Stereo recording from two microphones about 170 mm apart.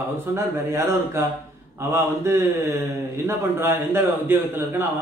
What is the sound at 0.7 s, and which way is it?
A man's voice, 15° right (ahead or behind).